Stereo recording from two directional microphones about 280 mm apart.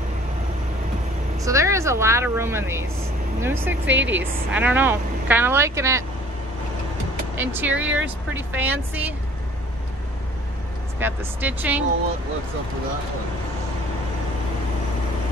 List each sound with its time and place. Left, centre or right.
1.4 s speech: centre
3.8 s a woman's voice: right
4.2 s a woman's voice: centre
7.3 s a woman's voice: centre
11.0 s a woman's voice: centre